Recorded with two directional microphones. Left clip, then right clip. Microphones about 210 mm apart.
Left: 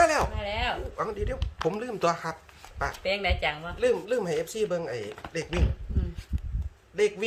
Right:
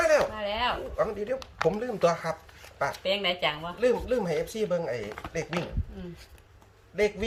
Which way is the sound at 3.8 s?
15° left (ahead or behind).